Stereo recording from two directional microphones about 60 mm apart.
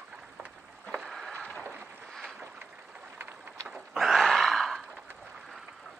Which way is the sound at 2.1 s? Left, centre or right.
Centre.